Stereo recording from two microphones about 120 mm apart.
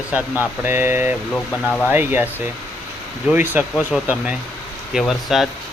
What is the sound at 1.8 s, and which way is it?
Speech, 20° right (ahead or behind).